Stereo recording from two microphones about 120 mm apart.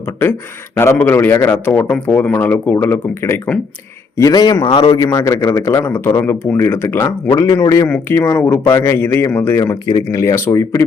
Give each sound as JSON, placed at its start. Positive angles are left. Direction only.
{"t": 0.8, "sound": "a man's voice", "side_deg": 20}
{"t": 4.2, "sound": "a man's voice", "side_deg": 30}
{"t": 5.1, "sound": "a man's voice", "side_deg": 25}
{"t": 7.3, "sound": "a man's voice", "side_deg": 30}
{"t": 7.9, "sound": "a man's voice", "side_deg": 15}
{"t": 9.9, "sound": "a man's voice", "side_deg": 30}